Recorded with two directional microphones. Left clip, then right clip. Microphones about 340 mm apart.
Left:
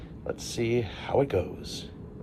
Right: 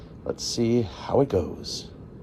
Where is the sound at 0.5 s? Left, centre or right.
Right.